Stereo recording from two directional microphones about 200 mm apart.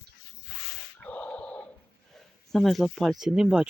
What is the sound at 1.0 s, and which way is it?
Gasp, 5° left (ahead or behind).